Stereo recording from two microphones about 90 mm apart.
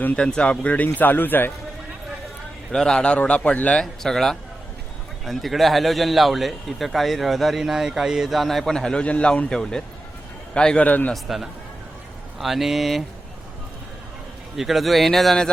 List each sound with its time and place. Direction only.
0.0 s a man's voice: 10° left (ahead or behind)
2.7 s a man's voice: 10° left (ahead or behind)
11.1 s a man's voice: centre (ahead or behind)
14.5 s a man's voice: centre (ahead or behind)